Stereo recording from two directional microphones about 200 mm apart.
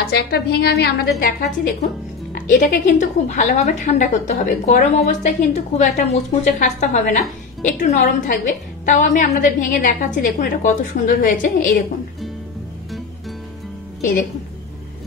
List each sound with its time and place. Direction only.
0.1 s a woman's voice: 55° left (ahead or behind)
2.3 s a woman's voice: 40° left (ahead or behind)